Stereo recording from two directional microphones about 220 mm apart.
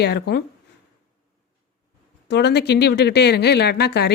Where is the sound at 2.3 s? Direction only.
50° left (ahead or behind).